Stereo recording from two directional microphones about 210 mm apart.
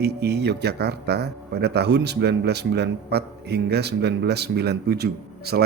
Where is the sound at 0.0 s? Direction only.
50° right (ahead or behind).